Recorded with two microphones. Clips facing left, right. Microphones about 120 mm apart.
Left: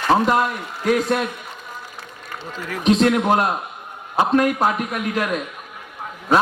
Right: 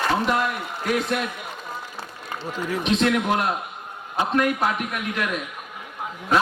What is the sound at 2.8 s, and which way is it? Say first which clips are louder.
A man's voice: left 6 dB; 40° left (ahead or behind).